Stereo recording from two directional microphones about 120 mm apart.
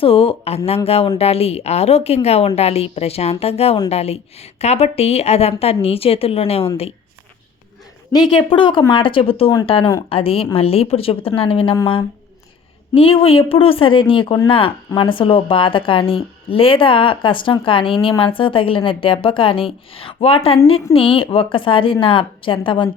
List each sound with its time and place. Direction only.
0.0 s a woman's voice: 50° left (ahead or behind)
8.4 s speech: 45° left (ahead or behind)
12.9 s speech: 50° left (ahead or behind)